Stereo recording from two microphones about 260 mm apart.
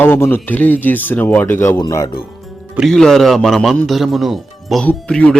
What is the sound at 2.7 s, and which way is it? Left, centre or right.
Speech, centre.